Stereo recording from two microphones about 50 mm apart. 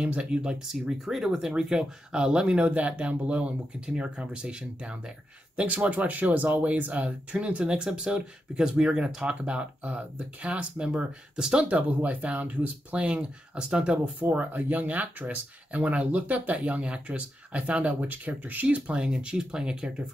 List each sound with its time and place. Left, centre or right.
0.0 s speech: right
0.7 s speech: centre
5.6 s speech: right
10.9 s speech: centre
11.7 s speech: right
13.0 s speech: right
14.3 s speech: right; by 19.9 s centre